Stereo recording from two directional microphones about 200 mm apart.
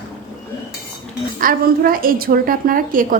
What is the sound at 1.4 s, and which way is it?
A woman's voice, 45° right (ahead or behind).